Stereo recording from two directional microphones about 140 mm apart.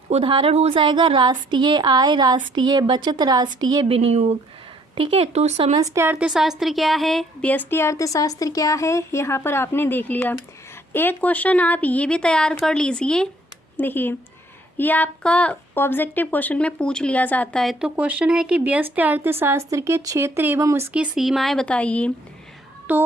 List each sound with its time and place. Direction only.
0.1 s a woman's voice: 45° right (ahead or behind)
0.8 s a woman's voice: 35° right (ahead or behind)
3.8 s speech: 45° right (ahead or behind)
5.7 s a woman's voice: 25° right (ahead or behind)
20.9 s a woman's voice: 5° right (ahead or behind)
22.9 s child singing: 10° right (ahead or behind)